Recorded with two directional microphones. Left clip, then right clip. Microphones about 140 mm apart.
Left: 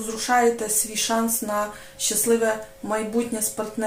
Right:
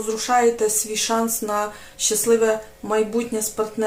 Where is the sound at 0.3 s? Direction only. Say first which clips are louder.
Right 2 dB; 30° right (ahead or behind).